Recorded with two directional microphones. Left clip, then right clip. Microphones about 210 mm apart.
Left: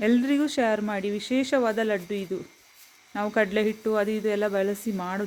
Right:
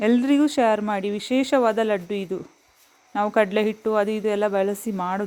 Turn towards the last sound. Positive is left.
turn(degrees=-15)  # may be behind; listen again after turning